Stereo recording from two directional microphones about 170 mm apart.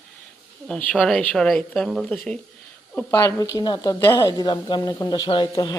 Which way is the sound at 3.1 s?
20° left (ahead or behind).